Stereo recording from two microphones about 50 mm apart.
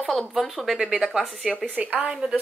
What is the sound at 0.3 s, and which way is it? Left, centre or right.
Speech, centre.